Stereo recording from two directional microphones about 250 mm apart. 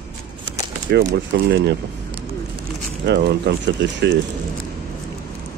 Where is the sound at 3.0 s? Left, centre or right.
Right.